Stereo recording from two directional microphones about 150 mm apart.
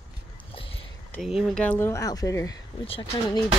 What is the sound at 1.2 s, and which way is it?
Speech, centre (ahead or behind).